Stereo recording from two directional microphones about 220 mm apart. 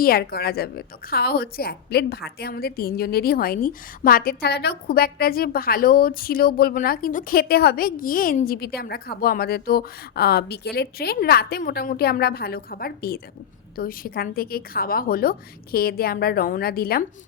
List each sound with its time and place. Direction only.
0.0 s a woman's voice: 45° left (ahead or behind)